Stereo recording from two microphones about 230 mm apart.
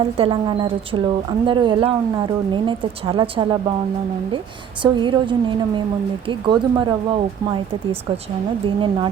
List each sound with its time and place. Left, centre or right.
0.2 s a woman's voice: right
4.8 s a woman's voice: right
8.6 s a woman's voice: right